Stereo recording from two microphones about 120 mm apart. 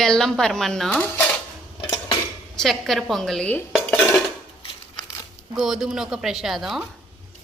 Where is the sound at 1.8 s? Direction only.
40° left (ahead or behind).